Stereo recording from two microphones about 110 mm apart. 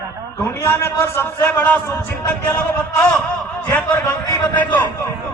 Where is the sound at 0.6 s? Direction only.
20° left (ahead or behind).